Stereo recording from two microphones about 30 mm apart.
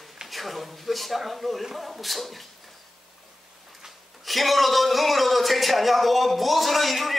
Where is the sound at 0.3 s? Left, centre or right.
Centre.